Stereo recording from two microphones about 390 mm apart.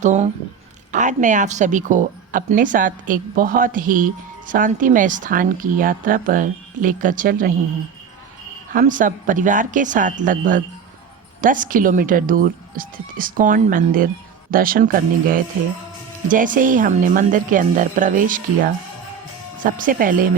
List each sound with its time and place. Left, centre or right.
0.0 s speech: centre
8.7 s speech: centre